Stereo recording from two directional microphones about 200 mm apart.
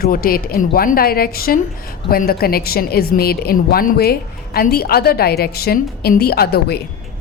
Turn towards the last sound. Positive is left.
turn(degrees=55)  # may be behind; listen again after turning